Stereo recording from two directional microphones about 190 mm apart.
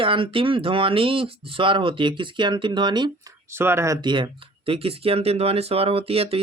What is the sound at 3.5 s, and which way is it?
Speech, 15° right (ahead or behind).